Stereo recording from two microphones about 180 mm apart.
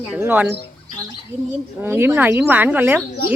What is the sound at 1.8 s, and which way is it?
Speech, 10° right (ahead or behind).